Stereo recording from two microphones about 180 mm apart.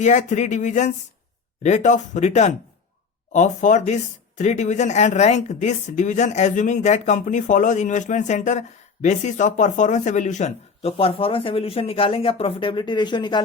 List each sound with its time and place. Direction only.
0.0 s speech: 40° left (ahead or behind); by 13.4 s 25° left (ahead or behind)